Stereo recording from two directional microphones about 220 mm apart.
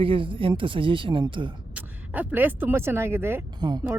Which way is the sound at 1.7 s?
10° right (ahead or behind).